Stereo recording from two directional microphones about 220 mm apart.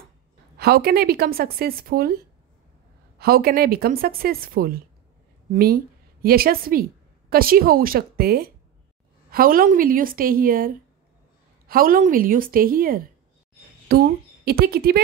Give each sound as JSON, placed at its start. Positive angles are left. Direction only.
{"t": 0.6, "sound": "a woman's voice", "side_deg": -45}